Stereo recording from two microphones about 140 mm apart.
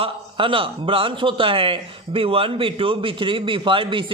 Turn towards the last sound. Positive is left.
turn(degrees=-40)  # may be behind; listen again after turning